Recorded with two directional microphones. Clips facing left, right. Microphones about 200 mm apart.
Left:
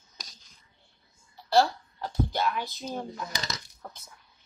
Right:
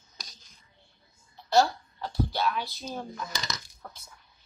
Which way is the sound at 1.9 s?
15° left (ahead or behind).